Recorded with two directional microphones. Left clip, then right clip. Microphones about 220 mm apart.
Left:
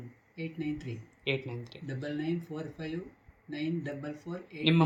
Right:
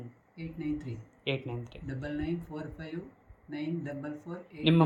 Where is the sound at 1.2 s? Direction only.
5° right (ahead or behind).